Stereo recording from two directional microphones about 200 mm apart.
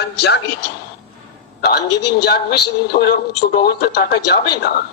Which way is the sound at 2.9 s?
35° left (ahead or behind).